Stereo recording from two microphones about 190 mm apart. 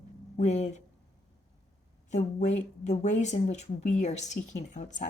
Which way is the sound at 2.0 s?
40° left (ahead or behind).